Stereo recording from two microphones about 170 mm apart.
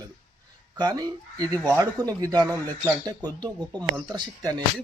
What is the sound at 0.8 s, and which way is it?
A man's voice, 20° right (ahead or behind).